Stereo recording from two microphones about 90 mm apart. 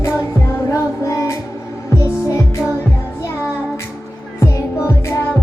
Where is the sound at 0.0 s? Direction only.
25° left (ahead or behind).